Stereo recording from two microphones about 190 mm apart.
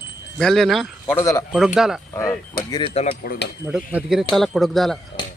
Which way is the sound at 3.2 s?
55° left (ahead or behind).